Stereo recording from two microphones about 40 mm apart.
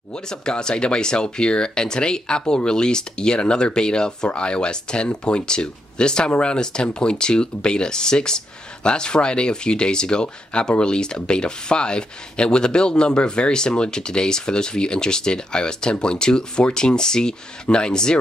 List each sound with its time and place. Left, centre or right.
0.1 s speech: centre